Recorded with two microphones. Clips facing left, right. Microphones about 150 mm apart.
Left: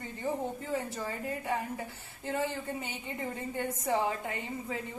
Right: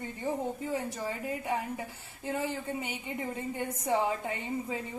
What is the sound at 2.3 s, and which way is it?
A woman's voice, 15° right (ahead or behind).